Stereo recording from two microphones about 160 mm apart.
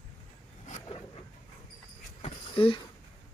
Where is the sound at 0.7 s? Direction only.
50° left (ahead or behind).